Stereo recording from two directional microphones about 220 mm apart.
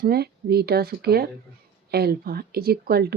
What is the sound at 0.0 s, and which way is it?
A woman's voice, 45° right (ahead or behind).